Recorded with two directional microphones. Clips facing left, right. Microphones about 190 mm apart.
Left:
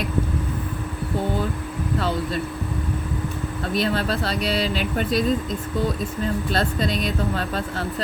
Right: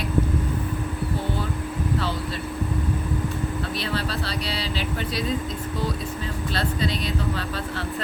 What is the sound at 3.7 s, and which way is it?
Speech, 45° left (ahead or behind).